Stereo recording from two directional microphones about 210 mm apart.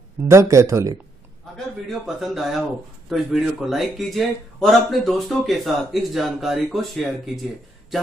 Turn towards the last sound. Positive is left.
turn(degrees=0)  # may be behind; listen again after turning